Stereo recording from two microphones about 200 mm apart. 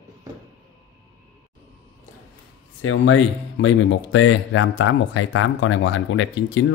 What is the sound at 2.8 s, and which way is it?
Speech, 75° left (ahead or behind).